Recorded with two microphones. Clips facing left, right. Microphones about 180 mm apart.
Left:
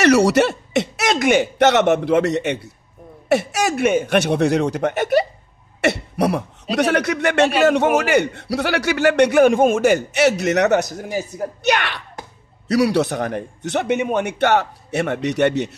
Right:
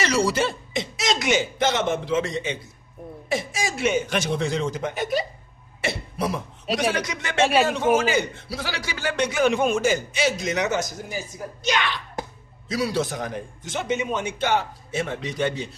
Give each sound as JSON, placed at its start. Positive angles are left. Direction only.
{"t": 0.0, "sound": "a man's voice", "side_deg": 70}